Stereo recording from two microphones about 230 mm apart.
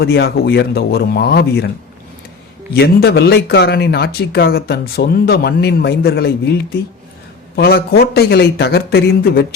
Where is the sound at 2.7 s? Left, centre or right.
Left.